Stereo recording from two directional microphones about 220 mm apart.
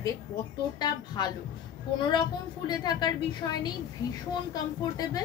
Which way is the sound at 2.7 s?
20° left (ahead or behind).